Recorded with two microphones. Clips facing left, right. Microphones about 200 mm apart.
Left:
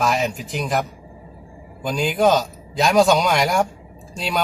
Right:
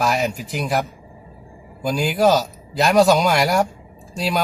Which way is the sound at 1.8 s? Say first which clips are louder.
Right 1 dB; 5° right (ahead or behind).